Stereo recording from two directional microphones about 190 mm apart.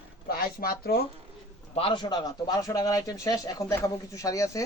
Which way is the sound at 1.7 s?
25° left (ahead or behind).